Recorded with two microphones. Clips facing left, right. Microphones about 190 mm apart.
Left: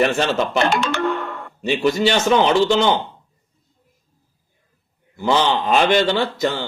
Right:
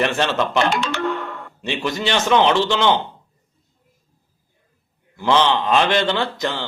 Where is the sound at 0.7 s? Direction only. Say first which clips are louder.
Left 2 dB; 50° left (ahead or behind).